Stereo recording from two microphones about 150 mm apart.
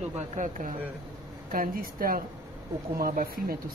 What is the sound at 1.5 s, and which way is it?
Speech, 70° right (ahead or behind).